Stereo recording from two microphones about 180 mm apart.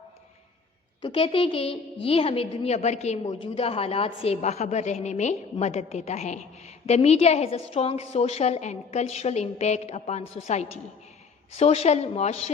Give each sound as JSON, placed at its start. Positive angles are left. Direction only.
{"t": 1.0, "sound": "a woman's voice", "side_deg": 30}
{"t": 3.2, "sound": "a woman's voice", "side_deg": 25}